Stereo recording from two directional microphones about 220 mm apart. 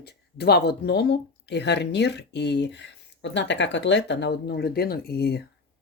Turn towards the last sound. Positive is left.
turn(degrees=45)  # may be behind; listen again after turning